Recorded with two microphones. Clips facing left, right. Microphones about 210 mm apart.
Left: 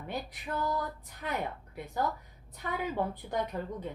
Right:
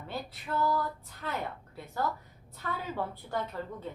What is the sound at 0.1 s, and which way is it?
A woman's voice, 15° left (ahead or behind).